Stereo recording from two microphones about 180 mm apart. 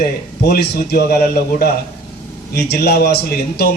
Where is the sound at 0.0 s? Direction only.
55° left (ahead or behind).